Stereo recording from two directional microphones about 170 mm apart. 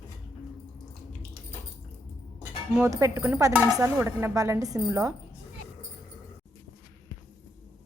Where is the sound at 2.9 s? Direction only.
15° right (ahead or behind).